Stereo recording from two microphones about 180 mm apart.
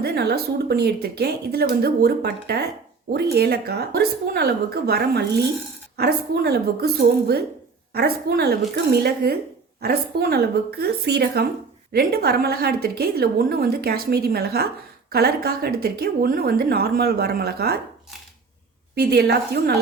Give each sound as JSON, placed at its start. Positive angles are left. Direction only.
{"t": 0.0, "sound": "a woman's voice", "side_deg": -65}
{"t": 18.9, "sound": "a woman's voice", "side_deg": -65}